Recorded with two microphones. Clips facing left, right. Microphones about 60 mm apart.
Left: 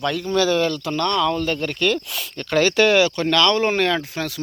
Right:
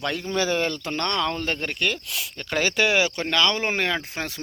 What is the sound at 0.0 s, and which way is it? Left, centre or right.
Speech, right.